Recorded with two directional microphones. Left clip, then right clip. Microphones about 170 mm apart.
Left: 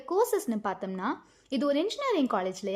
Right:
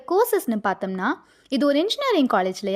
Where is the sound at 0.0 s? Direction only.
30° right (ahead or behind).